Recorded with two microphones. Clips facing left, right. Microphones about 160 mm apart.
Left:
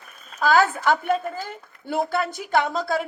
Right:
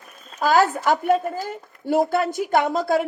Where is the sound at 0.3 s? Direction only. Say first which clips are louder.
Right 1 dB; 40° right (ahead or behind).